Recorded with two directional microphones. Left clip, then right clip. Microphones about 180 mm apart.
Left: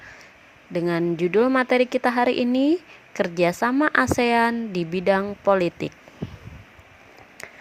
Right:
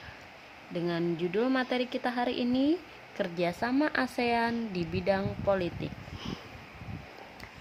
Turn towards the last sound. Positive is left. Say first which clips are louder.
# left 9 dB
turn(degrees=50)  # may be behind; listen again after turning